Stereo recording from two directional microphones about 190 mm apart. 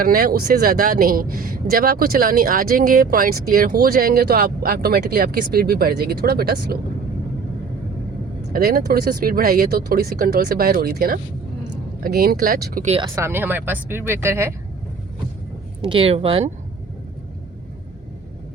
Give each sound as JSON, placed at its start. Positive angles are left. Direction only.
{"t": 0.0, "sound": "speech", "side_deg": -50}
{"t": 8.5, "sound": "speech", "side_deg": -55}
{"t": 12.8, "sound": "speech", "side_deg": -35}
{"t": 13.1, "sound": "speech", "side_deg": -10}
{"t": 15.8, "sound": "speech", "side_deg": -30}